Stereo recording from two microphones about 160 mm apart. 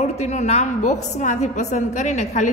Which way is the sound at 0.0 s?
45° left (ahead or behind).